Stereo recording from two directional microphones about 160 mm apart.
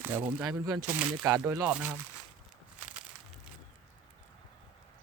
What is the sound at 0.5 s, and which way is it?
Speech, 20° right (ahead or behind).